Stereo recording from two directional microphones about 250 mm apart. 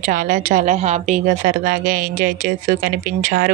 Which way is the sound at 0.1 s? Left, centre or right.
Right.